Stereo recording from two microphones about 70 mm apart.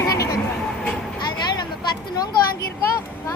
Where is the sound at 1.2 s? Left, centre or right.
Left.